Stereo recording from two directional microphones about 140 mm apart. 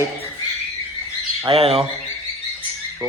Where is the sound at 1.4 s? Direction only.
45° right (ahead or behind).